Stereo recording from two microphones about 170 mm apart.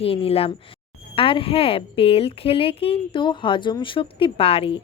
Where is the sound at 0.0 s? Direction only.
35° left (ahead or behind).